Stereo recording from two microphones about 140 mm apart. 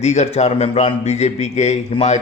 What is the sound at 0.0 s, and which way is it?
A man's voice, 55° left (ahead or behind).